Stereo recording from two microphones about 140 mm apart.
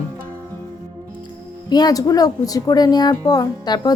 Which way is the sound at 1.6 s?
30° left (ahead or behind).